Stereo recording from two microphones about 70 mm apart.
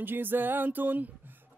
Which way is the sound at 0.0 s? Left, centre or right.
Right.